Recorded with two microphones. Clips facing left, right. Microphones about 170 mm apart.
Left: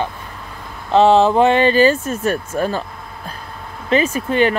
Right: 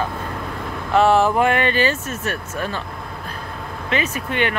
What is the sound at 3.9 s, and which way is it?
Speech, 35° left (ahead or behind).